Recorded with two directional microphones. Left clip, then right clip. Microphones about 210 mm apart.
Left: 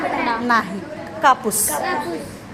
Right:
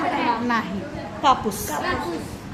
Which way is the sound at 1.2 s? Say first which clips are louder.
Left 4 dB; 15° left (ahead or behind).